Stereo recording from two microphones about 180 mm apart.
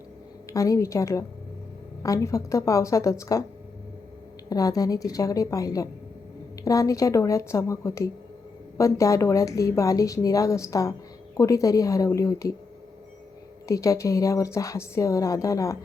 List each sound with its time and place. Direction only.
0.4 s speech: 20° left (ahead or behind)
4.4 s a woman's voice: 20° left (ahead or behind)
13.7 s speech: 20° left (ahead or behind)